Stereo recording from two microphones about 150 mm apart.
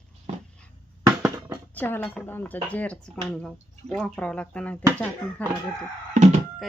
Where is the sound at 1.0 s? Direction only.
20° right (ahead or behind).